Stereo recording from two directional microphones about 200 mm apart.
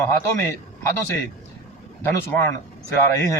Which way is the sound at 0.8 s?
15° left (ahead or behind).